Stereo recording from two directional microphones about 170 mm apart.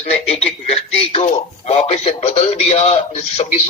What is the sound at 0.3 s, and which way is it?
Speech, 40° left (ahead or behind).